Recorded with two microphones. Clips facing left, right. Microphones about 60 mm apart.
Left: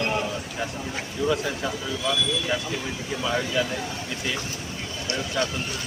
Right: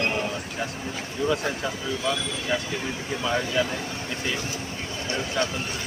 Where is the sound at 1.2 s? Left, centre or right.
Centre.